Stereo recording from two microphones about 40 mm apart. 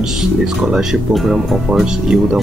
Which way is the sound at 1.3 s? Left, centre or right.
Centre.